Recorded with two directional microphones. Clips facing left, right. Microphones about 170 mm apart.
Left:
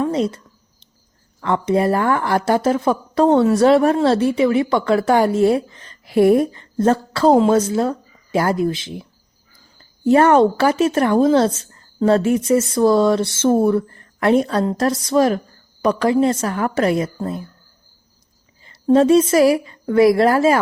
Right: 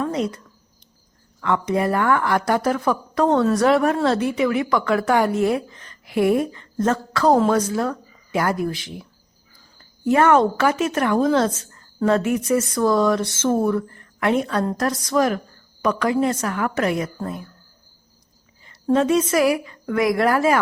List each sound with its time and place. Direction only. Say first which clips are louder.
0.0 s a sound: left 4 dB; 30° left (ahead or behind)
1.4 s speech: left 3 dB; 30° left (ahead or behind)
14.6 s speech: left 4 dB; 25° left (ahead or behind)
18.7 s speech: left 6 dB; 30° left (ahead or behind)